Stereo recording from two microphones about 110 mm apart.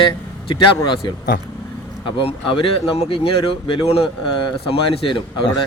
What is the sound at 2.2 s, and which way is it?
Speech, 55° left (ahead or behind).